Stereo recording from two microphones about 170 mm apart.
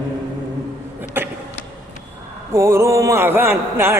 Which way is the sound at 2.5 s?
15° right (ahead or behind).